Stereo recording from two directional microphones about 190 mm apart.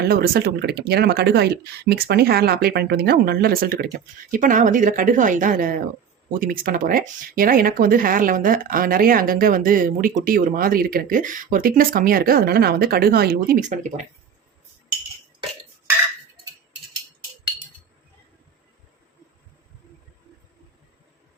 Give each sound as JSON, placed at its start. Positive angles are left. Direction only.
{"t": 0.0, "sound": "speech", "side_deg": -55}